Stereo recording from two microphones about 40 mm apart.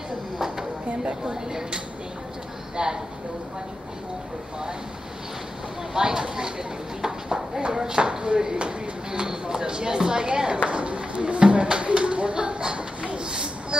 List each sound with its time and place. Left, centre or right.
1.2 s speech: centre
5.9 s speech: centre
10.7 s a sound: right